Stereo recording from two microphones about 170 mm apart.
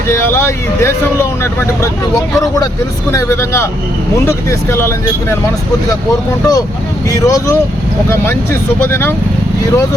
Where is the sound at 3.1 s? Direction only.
15° left (ahead or behind).